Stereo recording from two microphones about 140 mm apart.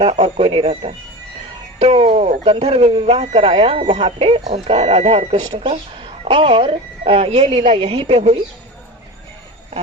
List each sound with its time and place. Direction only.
0.0 s speech: 45° right (ahead or behind)